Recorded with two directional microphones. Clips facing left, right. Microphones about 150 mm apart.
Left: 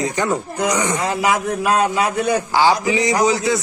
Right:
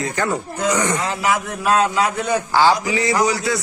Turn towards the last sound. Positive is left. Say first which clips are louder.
# left 2 dB
turn(degrees=20)  # may be behind; listen again after turning